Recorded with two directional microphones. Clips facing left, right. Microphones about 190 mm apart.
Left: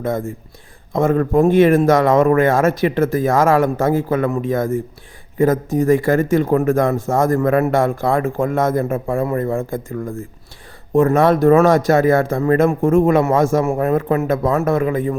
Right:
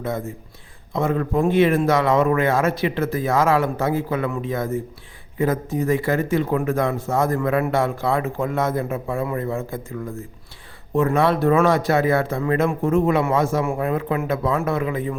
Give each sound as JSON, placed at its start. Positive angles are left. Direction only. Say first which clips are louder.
{"t": 0.0, "sound": "speech", "louder": "left 5 dB", "side_deg": 50}